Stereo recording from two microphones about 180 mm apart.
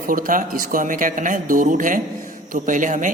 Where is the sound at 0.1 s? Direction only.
50° right (ahead or behind).